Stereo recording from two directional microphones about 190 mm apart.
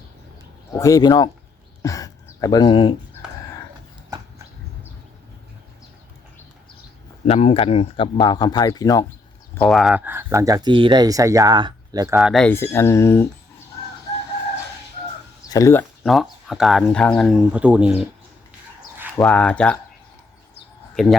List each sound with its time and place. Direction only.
0.7 s speech: 15° left (ahead or behind)
1.8 s a sound: 15° left (ahead or behind)
7.3 s speech: 35° left (ahead or behind)
9.6 s speech: centre (ahead or behind); by 12.1 s 20° right (ahead or behind)
12.1 s speech: centre (ahead or behind)
15.4 s speech: 15° left (ahead or behind)
16.5 s speech: centre (ahead or behind)
19.1 s speech: 5° left (ahead or behind)
20.9 s a man's voice: centre (ahead or behind)